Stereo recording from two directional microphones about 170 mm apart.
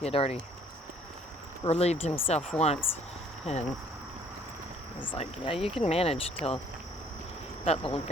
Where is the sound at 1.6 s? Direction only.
40° left (ahead or behind).